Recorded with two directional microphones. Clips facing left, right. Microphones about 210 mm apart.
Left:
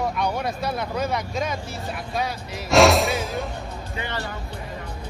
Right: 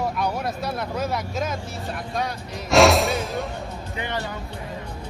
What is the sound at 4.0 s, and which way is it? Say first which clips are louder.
Speech: right 2 dB; 15° right (ahead or behind).